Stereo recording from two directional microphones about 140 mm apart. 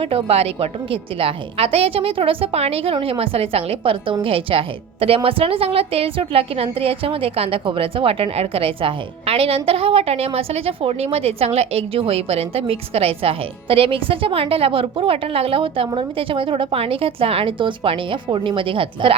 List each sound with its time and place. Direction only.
0.0 s a woman's voice: 40° right (ahead or behind)